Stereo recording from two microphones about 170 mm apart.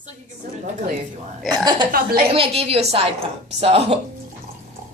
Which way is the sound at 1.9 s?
60° right (ahead or behind).